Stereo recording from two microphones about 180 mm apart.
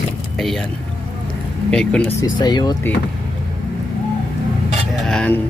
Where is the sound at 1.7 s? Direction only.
5° left (ahead or behind).